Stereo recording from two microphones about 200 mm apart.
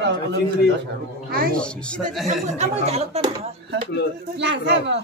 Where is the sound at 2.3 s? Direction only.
35° right (ahead or behind).